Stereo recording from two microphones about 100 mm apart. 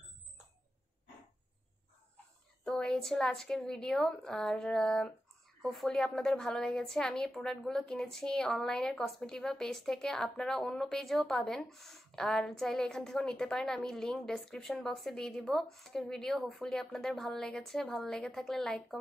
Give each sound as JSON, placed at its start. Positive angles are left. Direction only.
{"t": 2.6, "sound": "a woman's voice", "side_deg": 5}